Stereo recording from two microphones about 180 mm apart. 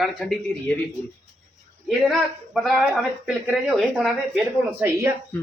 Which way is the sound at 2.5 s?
5° right (ahead or behind).